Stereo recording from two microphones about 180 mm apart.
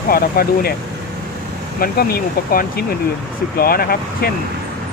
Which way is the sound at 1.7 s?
55° left (ahead or behind).